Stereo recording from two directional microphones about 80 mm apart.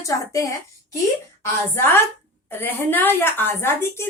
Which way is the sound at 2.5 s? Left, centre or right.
Left.